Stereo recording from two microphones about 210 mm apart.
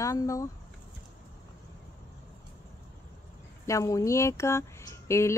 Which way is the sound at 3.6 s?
15° left (ahead or behind).